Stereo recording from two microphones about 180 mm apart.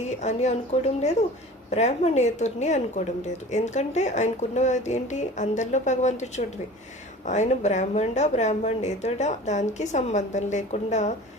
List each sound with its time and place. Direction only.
0.0 s speech: 40° left (ahead or behind)